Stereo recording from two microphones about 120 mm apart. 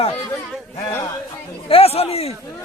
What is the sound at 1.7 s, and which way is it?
Speech, 55° left (ahead or behind).